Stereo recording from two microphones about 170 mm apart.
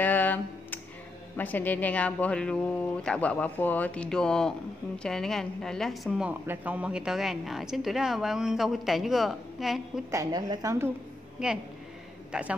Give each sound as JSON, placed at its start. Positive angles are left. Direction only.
{"t": 0.0, "sound": "a sound", "side_deg": 10}
{"t": 1.3, "sound": "speech", "side_deg": 10}
{"t": 10.1, "sound": "a woman's voice", "side_deg": -20}
{"t": 11.3, "sound": "a man's voice", "side_deg": -5}